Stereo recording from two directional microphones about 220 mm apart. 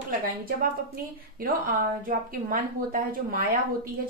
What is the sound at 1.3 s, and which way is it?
A woman's voice, 40° right (ahead or behind).